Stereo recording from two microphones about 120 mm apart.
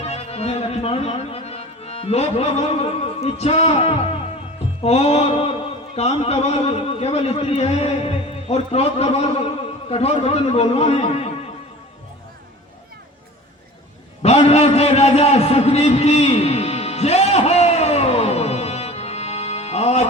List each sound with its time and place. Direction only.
0.1 s music: 60° left (ahead or behind)
4.8 s a man's voice: 60° left (ahead or behind)
14.2 s a sound: 60° left (ahead or behind)